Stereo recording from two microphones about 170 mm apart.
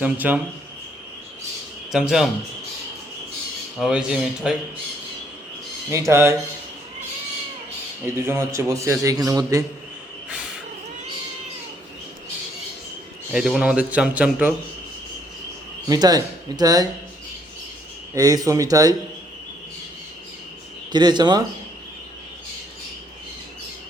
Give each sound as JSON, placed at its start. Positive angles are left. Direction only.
{"t": 0.0, "sound": "a man's voice", "side_deg": -10}
{"t": 1.9, "sound": "a man's voice", "side_deg": 0}
{"t": 3.8, "sound": "a man's voice", "side_deg": -5}
{"t": 5.9, "sound": "a man's voice", "side_deg": -15}
{"t": 8.0, "sound": "a man's voice", "side_deg": -15}
{"t": 13.3, "sound": "a man's voice", "side_deg": -5}
{"t": 15.9, "sound": "speech", "side_deg": -20}
{"t": 18.1, "sound": "speech", "side_deg": -20}
{"t": 20.9, "sound": "speech", "side_deg": -25}